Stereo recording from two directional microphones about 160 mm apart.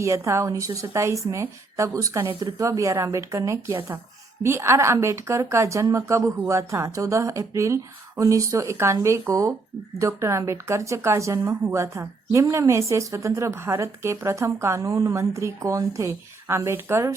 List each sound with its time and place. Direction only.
0.0 s a woman's voice: 20° right (ahead or behind)